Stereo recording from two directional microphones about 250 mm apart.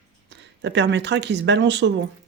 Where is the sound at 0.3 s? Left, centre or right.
Right.